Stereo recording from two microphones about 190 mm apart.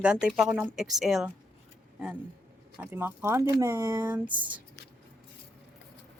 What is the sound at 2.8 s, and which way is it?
Speech, 10° right (ahead or behind).